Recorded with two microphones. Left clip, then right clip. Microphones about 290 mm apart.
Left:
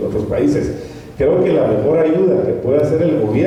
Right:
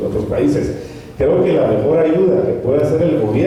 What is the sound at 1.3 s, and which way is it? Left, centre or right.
A man's voice, centre.